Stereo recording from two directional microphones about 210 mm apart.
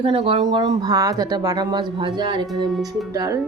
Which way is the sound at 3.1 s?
15° right (ahead or behind).